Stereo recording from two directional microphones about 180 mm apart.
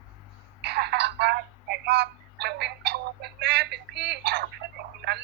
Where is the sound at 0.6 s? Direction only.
65° right (ahead or behind).